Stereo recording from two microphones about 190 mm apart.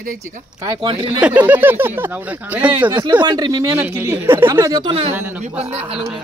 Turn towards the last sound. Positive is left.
turn(degrees=-30)  # may be behind; listen again after turning